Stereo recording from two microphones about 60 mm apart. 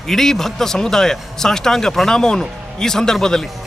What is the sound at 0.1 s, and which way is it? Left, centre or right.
A man's voice, centre.